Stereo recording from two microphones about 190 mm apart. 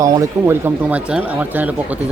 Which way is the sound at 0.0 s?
15° right (ahead or behind).